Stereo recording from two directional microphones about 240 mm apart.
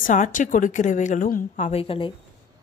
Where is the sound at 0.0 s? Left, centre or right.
Left.